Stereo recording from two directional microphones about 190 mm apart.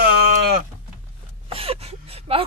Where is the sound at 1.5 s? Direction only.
30° right (ahead or behind).